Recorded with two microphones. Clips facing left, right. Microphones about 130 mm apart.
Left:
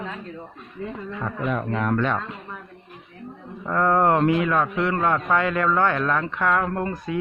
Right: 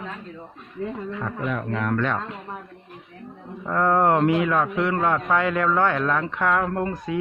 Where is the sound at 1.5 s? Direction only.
20° left (ahead or behind).